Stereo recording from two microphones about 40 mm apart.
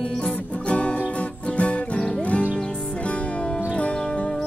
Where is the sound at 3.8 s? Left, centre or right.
Left.